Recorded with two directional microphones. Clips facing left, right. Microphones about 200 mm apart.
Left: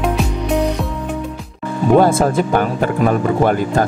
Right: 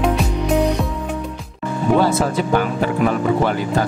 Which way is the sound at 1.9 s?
50° left (ahead or behind).